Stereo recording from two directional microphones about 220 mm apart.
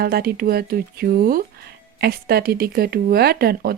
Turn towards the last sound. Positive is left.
turn(degrees=-45)  # may be behind; listen again after turning